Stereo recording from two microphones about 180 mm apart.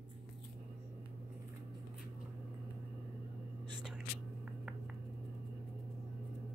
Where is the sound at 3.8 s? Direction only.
5° right (ahead or behind).